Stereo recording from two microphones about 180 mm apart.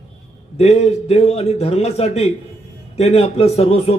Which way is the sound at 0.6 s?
35° left (ahead or behind).